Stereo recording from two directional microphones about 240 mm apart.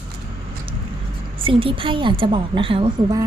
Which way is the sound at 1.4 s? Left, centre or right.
Right.